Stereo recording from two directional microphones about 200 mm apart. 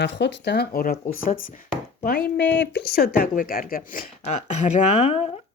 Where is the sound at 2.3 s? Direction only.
60° left (ahead or behind).